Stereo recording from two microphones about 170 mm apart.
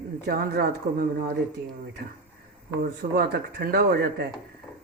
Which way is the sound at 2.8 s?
70° right (ahead or behind).